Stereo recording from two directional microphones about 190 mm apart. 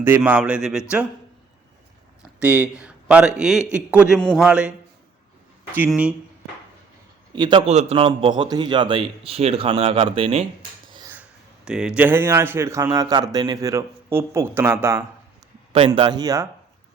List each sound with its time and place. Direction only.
0.0 s a man's voice: 10° right (ahead or behind)
2.4 s a man's voice: 10° right (ahead or behind)
5.7 s a man's voice: 10° right (ahead or behind)
7.3 s a man's voice: 25° right (ahead or behind)
7.7 s a man's voice: 35° right (ahead or behind)
11.1 s a man's voice: 5° right (ahead or behind)